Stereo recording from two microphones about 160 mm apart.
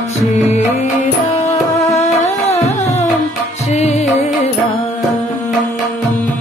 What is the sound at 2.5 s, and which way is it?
Music, 45° left (ahead or behind).